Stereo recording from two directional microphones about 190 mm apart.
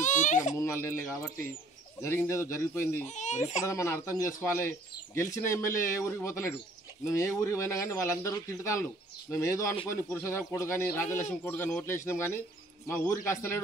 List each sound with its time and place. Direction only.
0.0 s baby cry: 40° left (ahead or behind)
0.6 s speech: 15° left (ahead or behind)
3.1 s speech: 40° left (ahead or behind)
3.6 s speech: 15° left (ahead or behind)